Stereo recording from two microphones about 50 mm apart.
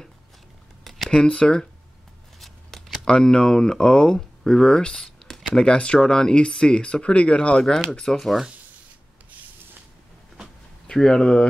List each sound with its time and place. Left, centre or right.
0.8 s a sound: centre
1.1 s speech: centre
2.4 s scissors: centre
3.1 s speech: centre
5.7 s speech: left
7.9 s speech: centre
10.9 s speech: centre